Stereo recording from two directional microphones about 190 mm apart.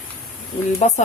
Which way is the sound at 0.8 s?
35° left (ahead or behind).